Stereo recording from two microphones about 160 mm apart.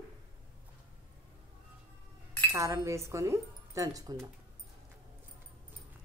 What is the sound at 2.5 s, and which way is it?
Speech, 20° right (ahead or behind).